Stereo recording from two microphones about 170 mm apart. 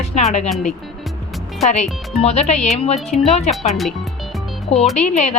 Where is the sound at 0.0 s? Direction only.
40° left (ahead or behind).